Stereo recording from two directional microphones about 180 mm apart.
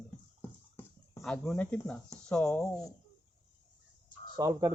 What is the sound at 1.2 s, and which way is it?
Speech, centre (ahead or behind).